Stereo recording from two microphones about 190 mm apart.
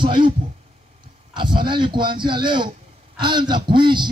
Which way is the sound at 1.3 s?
25° right (ahead or behind).